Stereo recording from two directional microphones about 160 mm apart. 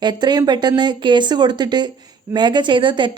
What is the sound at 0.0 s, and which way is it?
A woman's voice, 25° right (ahead or behind).